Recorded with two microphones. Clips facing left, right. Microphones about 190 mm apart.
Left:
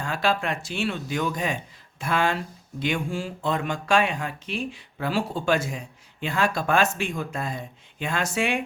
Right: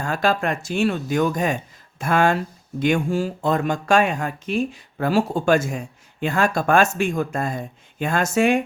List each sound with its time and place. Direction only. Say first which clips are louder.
0.0 s speech: right 4 dB; 45° right (ahead or behind)